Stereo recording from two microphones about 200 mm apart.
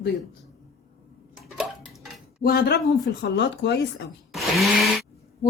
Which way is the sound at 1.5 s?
Centre (ahead or behind).